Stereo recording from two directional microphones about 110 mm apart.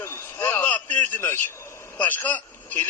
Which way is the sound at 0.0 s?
20° left (ahead or behind).